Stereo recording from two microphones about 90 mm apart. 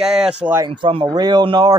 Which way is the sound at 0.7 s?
85° right.